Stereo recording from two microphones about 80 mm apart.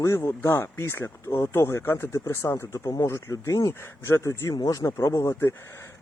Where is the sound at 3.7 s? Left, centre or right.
Left.